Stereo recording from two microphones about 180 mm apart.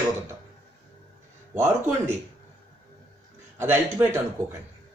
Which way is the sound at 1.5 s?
15° right (ahead or behind).